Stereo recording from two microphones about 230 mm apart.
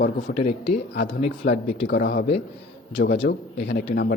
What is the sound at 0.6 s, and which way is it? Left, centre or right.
Speech, left.